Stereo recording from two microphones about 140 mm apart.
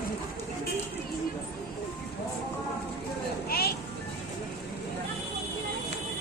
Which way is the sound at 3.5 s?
90° left.